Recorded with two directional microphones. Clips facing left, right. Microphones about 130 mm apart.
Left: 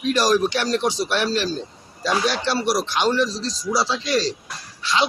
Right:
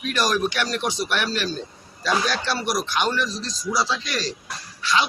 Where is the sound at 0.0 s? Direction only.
30° left (ahead or behind).